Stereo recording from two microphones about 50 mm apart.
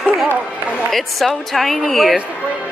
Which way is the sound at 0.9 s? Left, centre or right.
Centre.